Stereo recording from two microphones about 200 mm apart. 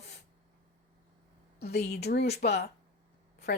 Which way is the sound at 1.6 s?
55° left (ahead or behind).